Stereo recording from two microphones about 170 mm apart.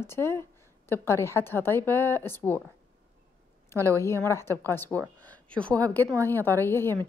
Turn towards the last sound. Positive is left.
turn(degrees=15)  # may be behind; listen again after turning